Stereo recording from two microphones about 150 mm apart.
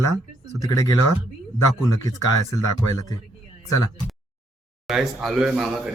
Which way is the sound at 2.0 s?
25° left (ahead or behind).